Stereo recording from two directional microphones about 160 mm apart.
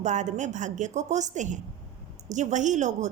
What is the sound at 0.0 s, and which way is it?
A woman's voice, 50° right (ahead or behind).